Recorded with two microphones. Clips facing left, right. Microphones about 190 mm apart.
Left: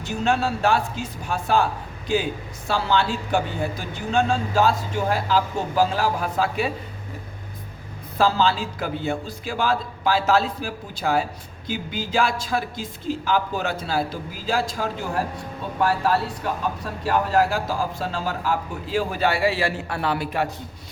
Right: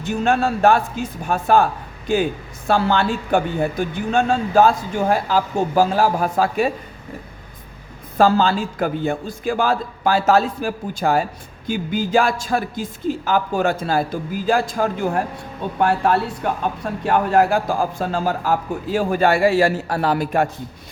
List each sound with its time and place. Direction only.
0.0 s a man's voice: 55° right (ahead or behind)
2.6 s a man's voice: 55° right (ahead or behind)
8.2 s a man's voice: 50° right (ahead or behind)